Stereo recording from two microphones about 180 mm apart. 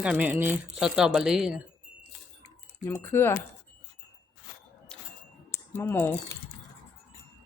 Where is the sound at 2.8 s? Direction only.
15° left (ahead or behind).